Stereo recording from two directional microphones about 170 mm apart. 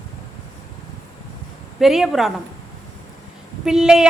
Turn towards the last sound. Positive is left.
turn(degrees=-5)  # may be behind; listen again after turning